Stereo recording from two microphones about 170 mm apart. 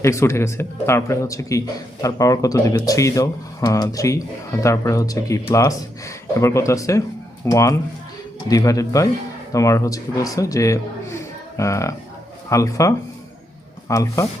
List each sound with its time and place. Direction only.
0.0 s a man's voice: 15° left (ahead or behind)